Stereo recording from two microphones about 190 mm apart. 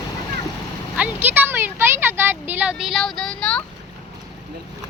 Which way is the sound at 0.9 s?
10° right (ahead or behind).